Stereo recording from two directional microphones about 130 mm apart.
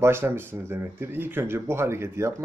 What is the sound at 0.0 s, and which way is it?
Speech, 20° right (ahead or behind).